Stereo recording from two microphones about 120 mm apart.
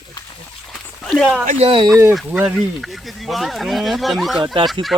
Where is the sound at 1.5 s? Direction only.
50° right (ahead or behind).